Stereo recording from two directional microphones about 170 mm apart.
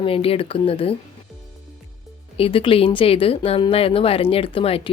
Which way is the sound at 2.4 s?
35° left (ahead or behind).